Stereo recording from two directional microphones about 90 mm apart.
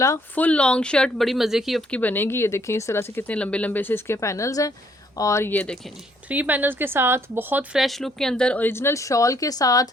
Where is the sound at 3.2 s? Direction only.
15° left (ahead or behind); by 5.4 s 35° left (ahead or behind).